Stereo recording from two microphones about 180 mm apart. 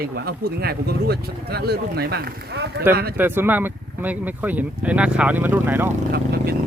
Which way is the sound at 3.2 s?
10° right (ahead or behind).